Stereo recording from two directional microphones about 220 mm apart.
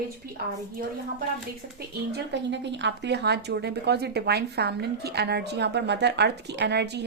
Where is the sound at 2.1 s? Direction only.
50° right (ahead or behind).